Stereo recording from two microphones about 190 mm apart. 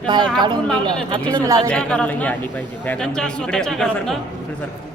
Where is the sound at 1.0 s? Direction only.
25° right (ahead or behind).